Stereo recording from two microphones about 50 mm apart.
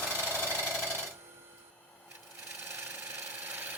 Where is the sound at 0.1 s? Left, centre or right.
Right.